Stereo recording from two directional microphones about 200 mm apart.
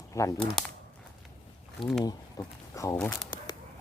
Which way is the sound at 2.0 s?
20° left (ahead or behind).